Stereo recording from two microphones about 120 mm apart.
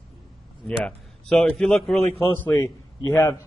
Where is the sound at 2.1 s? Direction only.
20° left (ahead or behind).